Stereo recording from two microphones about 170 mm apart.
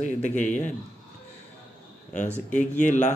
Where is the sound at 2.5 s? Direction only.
45° left (ahead or behind).